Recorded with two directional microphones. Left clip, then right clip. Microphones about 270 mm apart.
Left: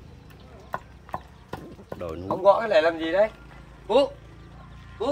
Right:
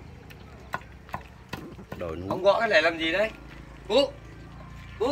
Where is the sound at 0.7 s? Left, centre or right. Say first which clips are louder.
Left 2 dB; left.